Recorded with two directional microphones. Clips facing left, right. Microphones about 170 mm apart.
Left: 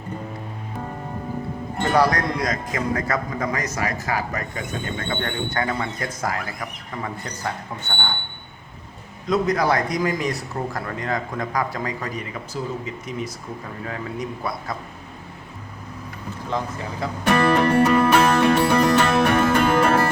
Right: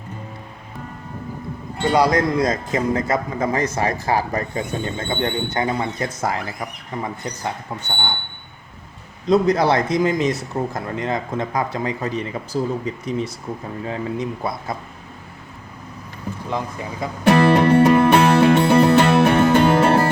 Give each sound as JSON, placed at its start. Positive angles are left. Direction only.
{"t": 1.8, "sound": "speech", "side_deg": -15}
{"t": 9.2, "sound": "speech", "side_deg": -30}
{"t": 16.5, "sound": "speech", "side_deg": -15}
{"t": 17.2, "sound": "music", "side_deg": -30}